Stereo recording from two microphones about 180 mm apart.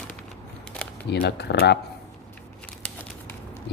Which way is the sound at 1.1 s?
65° left (ahead or behind).